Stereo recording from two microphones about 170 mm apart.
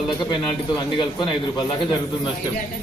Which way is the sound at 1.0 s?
25° left (ahead or behind).